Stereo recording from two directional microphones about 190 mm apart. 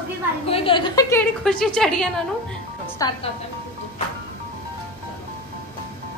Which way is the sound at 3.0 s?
20° left (ahead or behind).